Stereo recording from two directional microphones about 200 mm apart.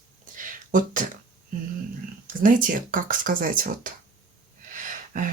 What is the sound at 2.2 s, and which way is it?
Speech, 45° right (ahead or behind).